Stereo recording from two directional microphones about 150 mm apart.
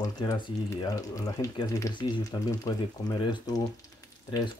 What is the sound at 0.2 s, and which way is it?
Speech, 30° left (ahead or behind).